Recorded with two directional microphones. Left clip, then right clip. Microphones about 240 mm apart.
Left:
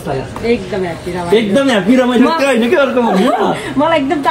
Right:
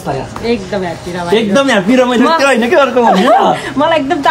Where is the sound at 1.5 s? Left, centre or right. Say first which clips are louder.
Right 2 dB; right.